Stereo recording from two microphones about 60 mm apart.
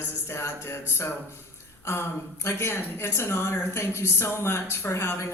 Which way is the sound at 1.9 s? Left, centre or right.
Left.